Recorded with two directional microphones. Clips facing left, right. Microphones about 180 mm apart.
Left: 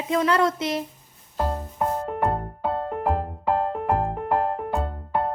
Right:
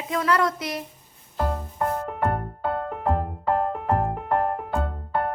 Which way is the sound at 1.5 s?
20° left (ahead or behind).